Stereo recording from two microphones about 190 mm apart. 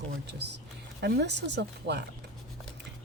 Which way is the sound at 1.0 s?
65° right (ahead or behind).